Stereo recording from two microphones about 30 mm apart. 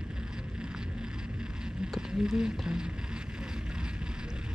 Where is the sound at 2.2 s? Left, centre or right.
Right.